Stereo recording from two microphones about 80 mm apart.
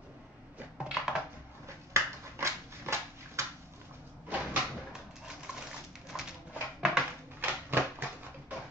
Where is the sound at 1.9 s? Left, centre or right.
Right.